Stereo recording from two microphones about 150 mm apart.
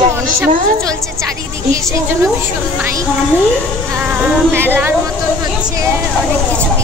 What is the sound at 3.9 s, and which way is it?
Speech, 5° right (ahead or behind).